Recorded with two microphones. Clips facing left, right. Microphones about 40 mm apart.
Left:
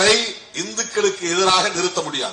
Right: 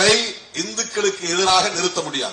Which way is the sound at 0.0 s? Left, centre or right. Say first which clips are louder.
Even; left.